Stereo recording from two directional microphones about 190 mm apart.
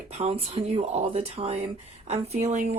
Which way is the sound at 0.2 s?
30° right (ahead or behind).